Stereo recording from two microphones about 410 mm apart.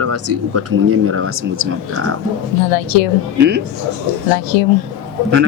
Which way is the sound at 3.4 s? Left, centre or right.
Right.